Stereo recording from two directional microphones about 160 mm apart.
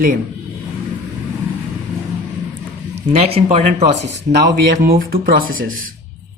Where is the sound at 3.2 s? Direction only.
40° right (ahead or behind).